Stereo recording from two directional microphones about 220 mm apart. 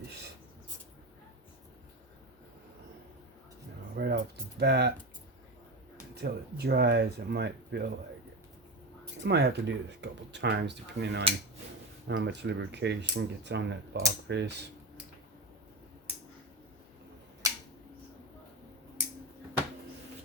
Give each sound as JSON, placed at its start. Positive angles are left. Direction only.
{"t": 3.9, "sound": "music", "side_deg": -45}
{"t": 4.6, "sound": "speech", "side_deg": -50}
{"t": 6.1, "sound": "speech", "side_deg": -50}
{"t": 9.2, "sound": "speech", "side_deg": -50}